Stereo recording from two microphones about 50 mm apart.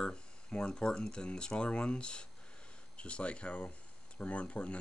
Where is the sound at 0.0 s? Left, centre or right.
Centre.